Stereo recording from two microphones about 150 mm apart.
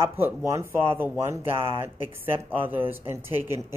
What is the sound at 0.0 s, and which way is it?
Speech, 15° right (ahead or behind).